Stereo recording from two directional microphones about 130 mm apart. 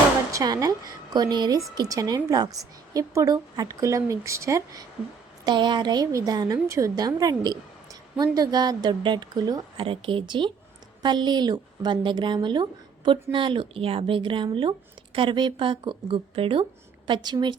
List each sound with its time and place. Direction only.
0.3 s a woman's voice: 25° right (ahead or behind)
5.5 s a woman's voice: 35° right (ahead or behind)
9.8 s a woman's voice: 45° right (ahead or behind)